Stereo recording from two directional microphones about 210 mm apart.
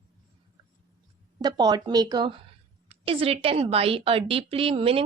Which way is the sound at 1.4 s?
20° right (ahead or behind).